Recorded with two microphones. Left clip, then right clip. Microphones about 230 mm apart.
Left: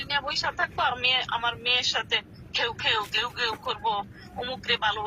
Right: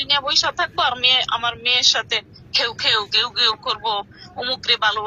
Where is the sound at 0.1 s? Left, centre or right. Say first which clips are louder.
Right 9 dB; right.